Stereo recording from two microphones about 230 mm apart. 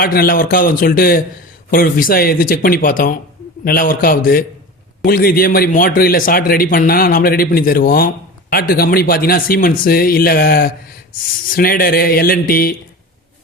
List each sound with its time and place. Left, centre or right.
0.0 s a man's voice: left